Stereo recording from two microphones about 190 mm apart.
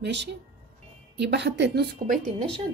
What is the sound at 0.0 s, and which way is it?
A woman's voice, 65° right (ahead or behind).